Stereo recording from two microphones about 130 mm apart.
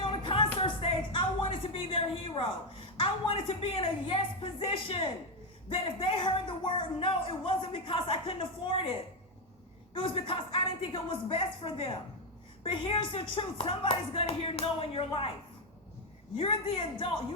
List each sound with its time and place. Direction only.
0.0 s a sound: 40° left (ahead or behind)
5.6 s speech: 40° left (ahead or behind)
9.9 s speech: 45° left (ahead or behind)
16.4 s speech: 45° left (ahead or behind)